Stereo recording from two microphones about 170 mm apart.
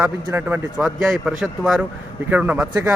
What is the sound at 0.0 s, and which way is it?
A man's voice, 10° right (ahead or behind).